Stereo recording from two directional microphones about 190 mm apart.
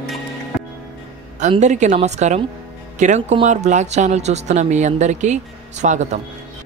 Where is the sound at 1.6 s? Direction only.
40° right (ahead or behind).